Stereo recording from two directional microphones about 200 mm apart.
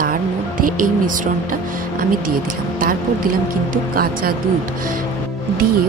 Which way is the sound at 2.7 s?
45° right (ahead or behind).